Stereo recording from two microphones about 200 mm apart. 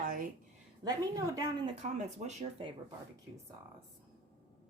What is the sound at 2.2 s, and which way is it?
Speech, 35° right (ahead or behind).